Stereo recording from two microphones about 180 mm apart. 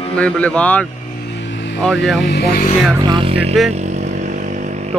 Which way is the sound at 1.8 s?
Centre (ahead or behind).